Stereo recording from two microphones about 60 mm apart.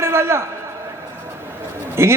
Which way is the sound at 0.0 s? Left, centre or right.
Right.